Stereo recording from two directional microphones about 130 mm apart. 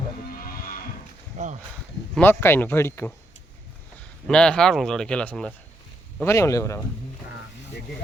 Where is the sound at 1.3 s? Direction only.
55° right (ahead or behind).